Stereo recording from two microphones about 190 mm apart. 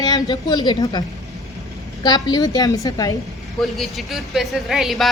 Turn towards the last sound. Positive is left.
turn(degrees=0)  # may be behind; listen again after turning